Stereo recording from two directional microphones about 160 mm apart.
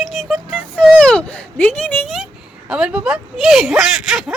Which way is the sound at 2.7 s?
5° right (ahead or behind).